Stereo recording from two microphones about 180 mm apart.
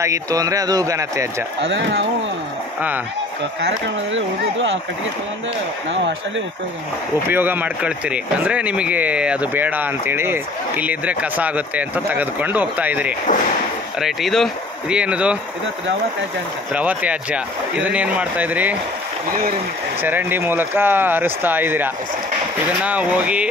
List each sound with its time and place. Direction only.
0.0 s speech: 20° right (ahead or behind)
1.6 s speech: 80° right
3.6 s speech: 90° right
5.9 s speech: 90° right
7.2 s speech: 10° right (ahead or behind)
16.7 s speech: 10° right (ahead or behind)
20.0 s speech: 10° right (ahead or behind)